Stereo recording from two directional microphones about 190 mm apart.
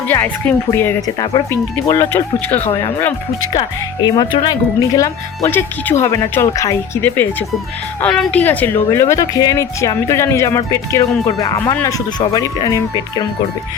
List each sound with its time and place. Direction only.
0.1 s speech: 10° left (ahead or behind)
2.6 s speech: 35° left (ahead or behind)
3.5 s speech: 20° left (ahead or behind)